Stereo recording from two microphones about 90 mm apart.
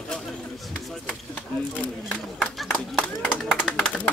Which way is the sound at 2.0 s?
Centre (ahead or behind).